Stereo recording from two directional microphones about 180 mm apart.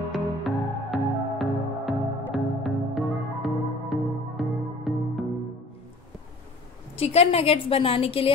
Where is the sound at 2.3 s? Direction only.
Centre (ahead or behind).